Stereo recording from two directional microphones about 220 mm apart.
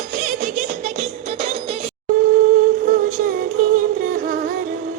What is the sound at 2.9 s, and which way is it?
Music, 35° right (ahead or behind).